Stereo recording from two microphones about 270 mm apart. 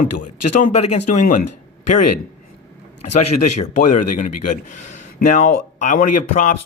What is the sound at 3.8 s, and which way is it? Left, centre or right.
Speech, left.